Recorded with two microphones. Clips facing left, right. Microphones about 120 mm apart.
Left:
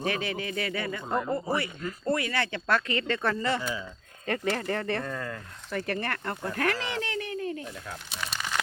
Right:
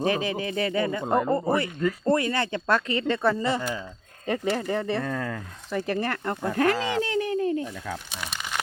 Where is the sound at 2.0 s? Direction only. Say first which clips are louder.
Right 3 dB; 35° right (ahead or behind).